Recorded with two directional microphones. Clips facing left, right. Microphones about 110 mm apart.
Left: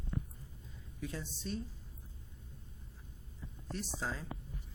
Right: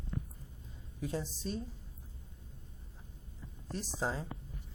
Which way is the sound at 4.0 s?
25° right (ahead or behind).